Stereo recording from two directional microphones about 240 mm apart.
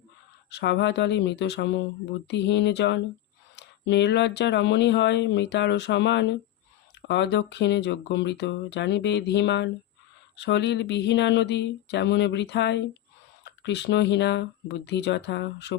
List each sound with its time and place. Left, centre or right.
0.5 s speech: left